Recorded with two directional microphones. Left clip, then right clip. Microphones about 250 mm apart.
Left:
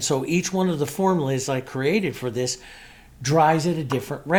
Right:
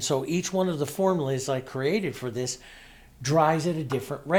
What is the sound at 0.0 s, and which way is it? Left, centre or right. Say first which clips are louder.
Speech: left 4 dB; right.